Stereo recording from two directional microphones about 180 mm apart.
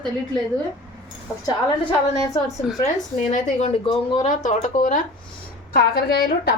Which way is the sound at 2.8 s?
45° left (ahead or behind).